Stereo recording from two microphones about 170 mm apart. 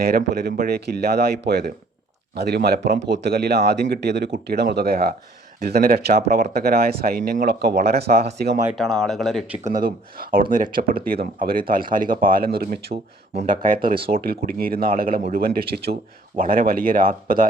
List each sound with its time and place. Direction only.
0.0 s speech: 60° right (ahead or behind)
8.8 s speech: centre (ahead or behind)
9.7 s speech: 55° right (ahead or behind)
12.9 s speech: 40° right (ahead or behind); by 16.0 s 65° right (ahead or behind)
16.4 s speech: 55° right (ahead or behind)